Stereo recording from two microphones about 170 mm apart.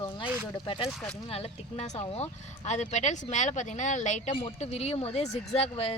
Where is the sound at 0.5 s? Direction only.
30° left (ahead or behind).